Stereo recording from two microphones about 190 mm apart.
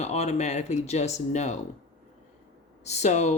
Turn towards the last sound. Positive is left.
turn(degrees=35)  # may be behind; listen again after turning